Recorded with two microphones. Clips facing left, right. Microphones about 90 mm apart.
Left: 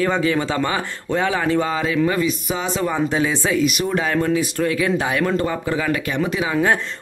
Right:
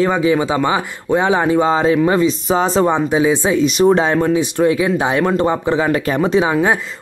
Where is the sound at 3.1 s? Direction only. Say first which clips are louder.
Right 5 dB; 15° right (ahead or behind); by 6.4 s 30° right (ahead or behind).